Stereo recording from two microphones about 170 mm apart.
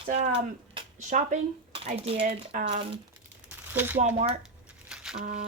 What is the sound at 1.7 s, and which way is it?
Speech, 35° right (ahead or behind).